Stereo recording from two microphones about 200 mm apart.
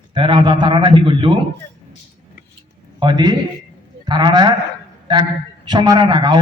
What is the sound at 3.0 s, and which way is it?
A man's voice, 20° right (ahead or behind).